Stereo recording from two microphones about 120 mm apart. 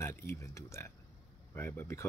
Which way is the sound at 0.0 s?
20° left (ahead or behind).